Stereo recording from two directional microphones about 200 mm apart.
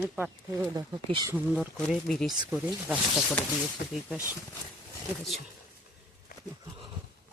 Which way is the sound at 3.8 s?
55° left (ahead or behind).